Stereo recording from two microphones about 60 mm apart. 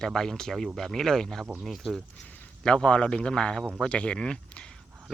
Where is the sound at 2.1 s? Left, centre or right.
Centre.